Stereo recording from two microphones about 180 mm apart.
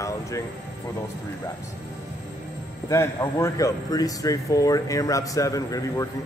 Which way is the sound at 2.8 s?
15° left (ahead or behind).